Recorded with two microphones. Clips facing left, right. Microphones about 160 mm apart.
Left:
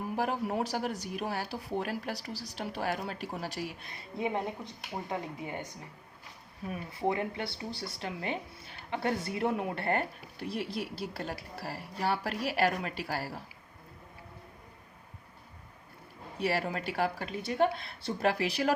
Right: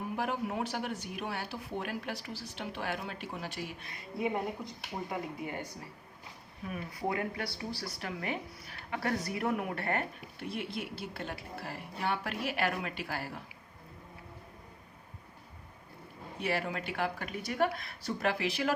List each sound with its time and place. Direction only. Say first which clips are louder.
0.2 s speech: left 3 dB; 35° left (ahead or behind)
4.2 s a woman's voice: even; 20° left (ahead or behind)
6.7 s speech: left 3 dB; 25° left (ahead or behind)
16.4 s speech: left 3 dB; 35° left (ahead or behind)